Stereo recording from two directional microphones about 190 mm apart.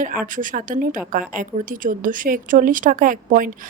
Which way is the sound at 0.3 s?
45° right (ahead or behind).